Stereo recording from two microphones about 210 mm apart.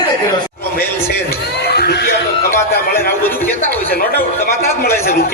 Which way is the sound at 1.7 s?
50° left (ahead or behind).